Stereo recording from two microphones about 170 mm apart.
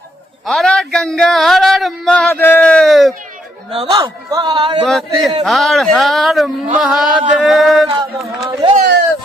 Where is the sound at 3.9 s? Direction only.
20° right (ahead or behind).